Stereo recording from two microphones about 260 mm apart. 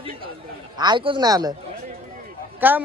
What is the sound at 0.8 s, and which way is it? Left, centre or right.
Speech, centre.